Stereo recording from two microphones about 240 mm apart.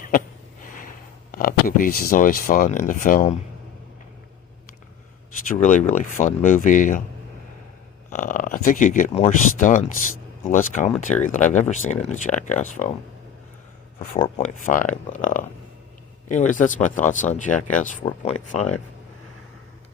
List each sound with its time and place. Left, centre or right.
0.6 s speech: left
5.5 s speech: left
8.1 s speech: left
14.2 s speech: left